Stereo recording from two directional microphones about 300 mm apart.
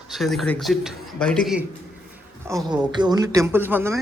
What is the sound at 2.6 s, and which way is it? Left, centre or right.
Speech, centre.